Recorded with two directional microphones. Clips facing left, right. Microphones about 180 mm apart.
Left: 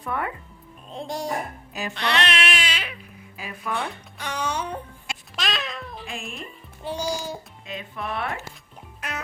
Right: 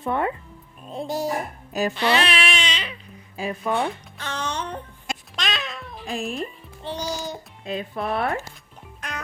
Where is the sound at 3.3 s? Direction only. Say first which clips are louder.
Right 6 dB; 25° right (ahead or behind).